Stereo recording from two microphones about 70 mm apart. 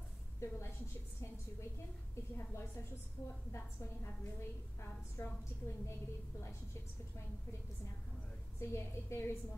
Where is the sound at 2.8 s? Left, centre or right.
Left.